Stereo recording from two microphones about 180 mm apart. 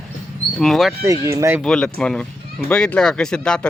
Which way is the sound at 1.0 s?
15° right (ahead or behind).